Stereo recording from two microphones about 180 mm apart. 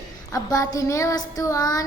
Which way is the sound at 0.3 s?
20° left (ahead or behind).